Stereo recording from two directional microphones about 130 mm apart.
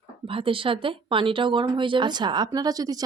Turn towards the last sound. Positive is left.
turn(degrees=-30)  # may be behind; listen again after turning